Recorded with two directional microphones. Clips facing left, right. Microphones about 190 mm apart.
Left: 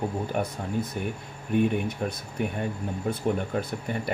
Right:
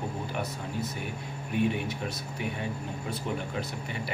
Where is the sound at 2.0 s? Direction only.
45° left (ahead or behind).